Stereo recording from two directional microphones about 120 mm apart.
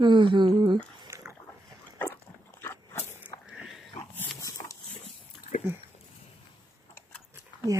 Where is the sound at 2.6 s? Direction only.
20° left (ahead or behind).